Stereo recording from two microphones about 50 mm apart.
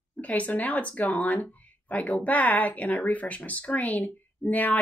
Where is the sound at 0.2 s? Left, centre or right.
Left.